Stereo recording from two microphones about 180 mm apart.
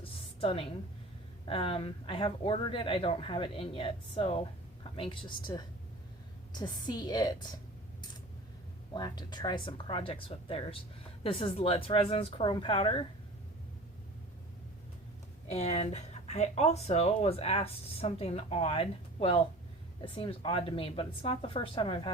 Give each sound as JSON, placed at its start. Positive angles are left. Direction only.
{"t": 0.0, "sound": "a sound", "side_deg": 30}
{"t": 1.5, "sound": "speech", "side_deg": 30}
{"t": 8.9, "sound": "speech", "side_deg": 20}
{"t": 15.4, "sound": "speech", "side_deg": 35}